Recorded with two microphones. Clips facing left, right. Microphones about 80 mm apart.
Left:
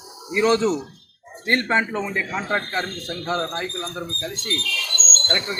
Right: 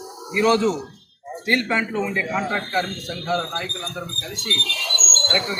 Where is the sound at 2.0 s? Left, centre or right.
Left.